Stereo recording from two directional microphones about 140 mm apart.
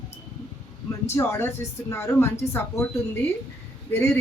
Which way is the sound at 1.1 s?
20° left (ahead or behind).